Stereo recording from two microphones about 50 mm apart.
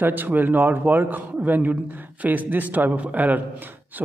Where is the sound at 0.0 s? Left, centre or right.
Right.